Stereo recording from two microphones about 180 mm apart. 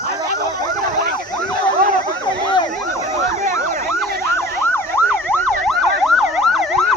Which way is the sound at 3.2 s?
45° right (ahead or behind).